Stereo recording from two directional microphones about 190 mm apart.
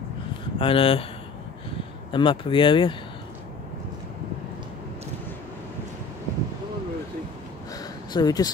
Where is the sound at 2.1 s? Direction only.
25° left (ahead or behind).